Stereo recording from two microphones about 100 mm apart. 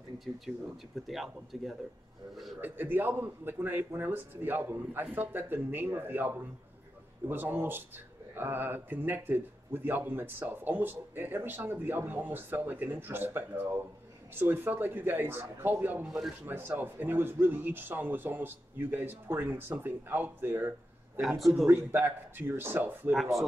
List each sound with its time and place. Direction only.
1.0 s speech: centre (ahead or behind)
2.6 s speech: 20° right (ahead or behind)
16.1 s speech: 5° right (ahead or behind)
16.4 s speech: 20° right (ahead or behind)
21.2 s speech: centre (ahead or behind)
21.6 s speech: 20° right (ahead or behind)